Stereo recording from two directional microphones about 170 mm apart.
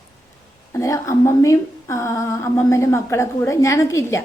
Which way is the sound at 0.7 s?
20° left (ahead or behind).